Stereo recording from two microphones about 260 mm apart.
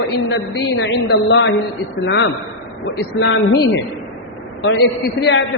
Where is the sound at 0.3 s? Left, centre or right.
Left.